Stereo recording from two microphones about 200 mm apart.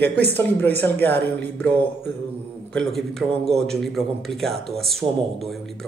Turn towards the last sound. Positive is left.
turn(degrees=0)  # may be behind; listen again after turning